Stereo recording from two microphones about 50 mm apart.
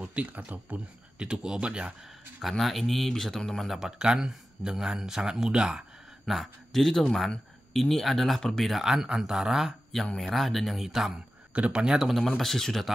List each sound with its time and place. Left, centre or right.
0.0 s speech: right
1.1 s speech: centre
2.4 s speech: centre
4.0 s a man's voice: centre
6.2 s speech: centre
8.7 s a man's voice: centre
10.1 s speech: centre
11.5 s speech: right
12.0 s speech: centre